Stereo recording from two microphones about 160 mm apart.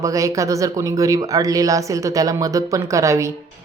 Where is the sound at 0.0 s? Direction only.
20° right (ahead or behind).